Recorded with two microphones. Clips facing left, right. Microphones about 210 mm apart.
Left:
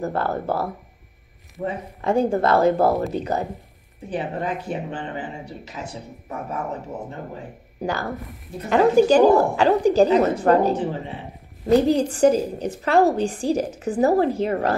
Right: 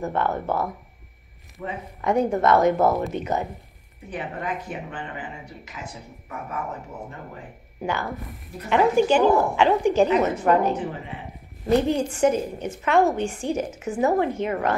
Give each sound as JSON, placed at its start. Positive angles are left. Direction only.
{"t": 0.0, "sound": "a woman's voice", "side_deg": 35}
{"t": 7.8, "sound": "a woman's voice", "side_deg": 35}